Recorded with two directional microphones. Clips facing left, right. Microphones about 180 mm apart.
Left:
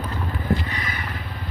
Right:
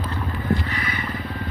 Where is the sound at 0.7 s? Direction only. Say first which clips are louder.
Right 2 dB; 40° left (ahead or behind).